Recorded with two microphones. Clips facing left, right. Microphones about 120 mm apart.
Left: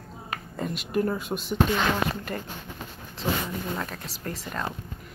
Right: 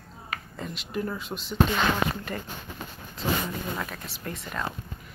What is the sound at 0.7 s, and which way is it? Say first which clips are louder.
Speech: left 6 dB; 50° left (ahead or behind).